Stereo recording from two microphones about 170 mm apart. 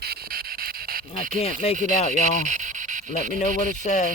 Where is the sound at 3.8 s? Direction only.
45° left (ahead or behind).